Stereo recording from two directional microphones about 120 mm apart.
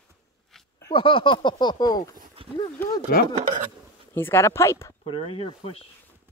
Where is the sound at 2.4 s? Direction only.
50° right (ahead or behind).